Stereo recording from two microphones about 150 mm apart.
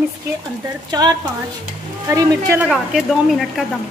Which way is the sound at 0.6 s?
25° right (ahead or behind).